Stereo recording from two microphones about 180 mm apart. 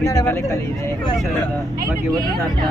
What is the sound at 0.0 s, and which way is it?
Speech, 15° left (ahead or behind).